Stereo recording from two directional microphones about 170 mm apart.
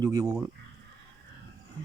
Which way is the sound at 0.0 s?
20° right (ahead or behind).